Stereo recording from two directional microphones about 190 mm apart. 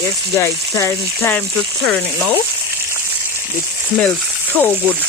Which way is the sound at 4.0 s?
10° left (ahead or behind).